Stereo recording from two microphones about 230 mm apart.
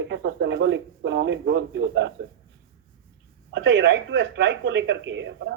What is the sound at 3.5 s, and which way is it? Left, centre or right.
Speech, right.